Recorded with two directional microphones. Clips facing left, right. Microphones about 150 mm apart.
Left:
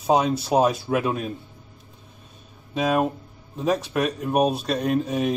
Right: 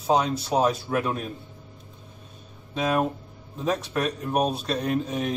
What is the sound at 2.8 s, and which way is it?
A man's voice, 5° left (ahead or behind).